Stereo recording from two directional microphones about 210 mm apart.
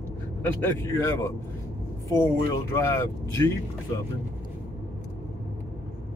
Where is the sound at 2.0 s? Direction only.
15° left (ahead or behind).